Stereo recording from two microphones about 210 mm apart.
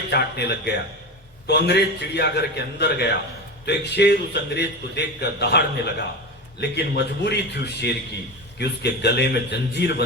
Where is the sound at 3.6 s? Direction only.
50° left (ahead or behind).